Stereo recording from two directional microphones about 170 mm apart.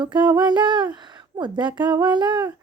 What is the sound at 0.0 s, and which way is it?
A woman's voice, 25° right (ahead or behind).